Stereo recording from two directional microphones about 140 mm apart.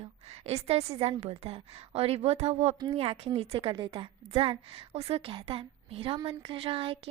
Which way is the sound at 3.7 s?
30° right (ahead or behind).